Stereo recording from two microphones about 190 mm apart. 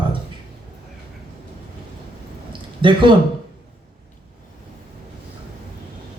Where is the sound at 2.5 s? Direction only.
25° right (ahead or behind).